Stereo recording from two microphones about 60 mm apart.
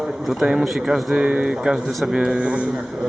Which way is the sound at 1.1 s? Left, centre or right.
Centre.